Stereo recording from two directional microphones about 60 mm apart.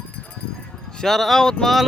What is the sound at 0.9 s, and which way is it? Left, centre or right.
Speech, centre.